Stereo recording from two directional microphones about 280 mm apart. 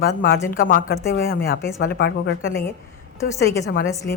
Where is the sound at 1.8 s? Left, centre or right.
Left.